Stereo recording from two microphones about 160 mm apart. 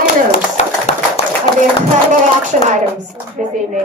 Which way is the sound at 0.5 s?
40° left (ahead or behind).